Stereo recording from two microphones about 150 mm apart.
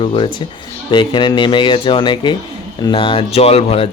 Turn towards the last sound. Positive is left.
turn(degrees=40)  # may be behind; listen again after turning